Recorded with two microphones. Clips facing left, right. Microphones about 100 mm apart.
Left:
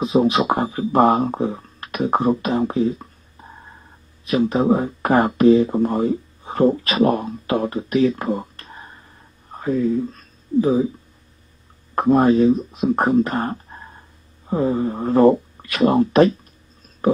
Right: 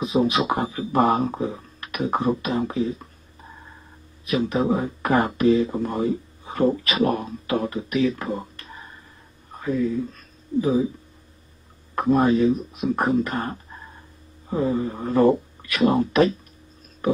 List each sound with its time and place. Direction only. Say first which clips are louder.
0.0 s speech: left 4 dB; 35° left (ahead or behind)
4.5 s speech: left 5 dB; 35° left (ahead or behind)
11.9 s speech: left 4 dB; 35° left (ahead or behind)